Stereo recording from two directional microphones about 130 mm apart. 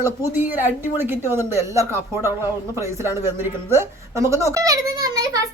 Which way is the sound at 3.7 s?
20° right (ahead or behind).